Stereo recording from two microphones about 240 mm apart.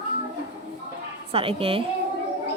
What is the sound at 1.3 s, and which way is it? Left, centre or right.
Speech, right.